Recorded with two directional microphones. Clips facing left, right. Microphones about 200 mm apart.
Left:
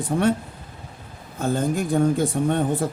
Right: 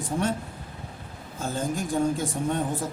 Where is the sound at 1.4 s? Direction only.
60° left (ahead or behind).